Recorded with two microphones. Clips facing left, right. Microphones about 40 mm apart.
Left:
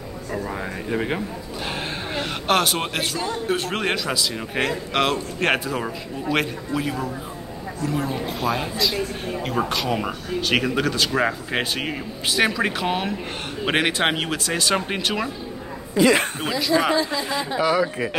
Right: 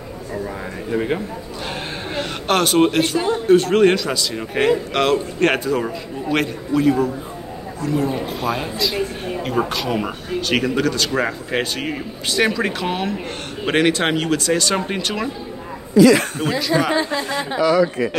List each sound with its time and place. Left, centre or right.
0.8 s a man's voice: centre
16.0 s a woman's voice: left
16.3 s speech: centre
16.9 s speech: right
17.6 s speech: centre